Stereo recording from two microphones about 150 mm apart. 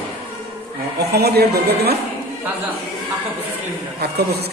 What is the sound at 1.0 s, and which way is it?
Speech, 90° right.